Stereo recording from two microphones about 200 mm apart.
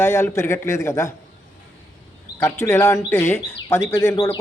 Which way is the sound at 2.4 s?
15° left (ahead or behind).